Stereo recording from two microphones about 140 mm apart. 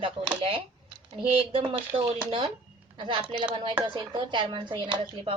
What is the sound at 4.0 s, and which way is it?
Speech, 35° right (ahead or behind).